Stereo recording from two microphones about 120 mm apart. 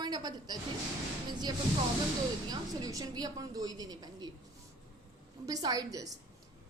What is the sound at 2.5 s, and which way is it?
A woman's voice, 30° right (ahead or behind).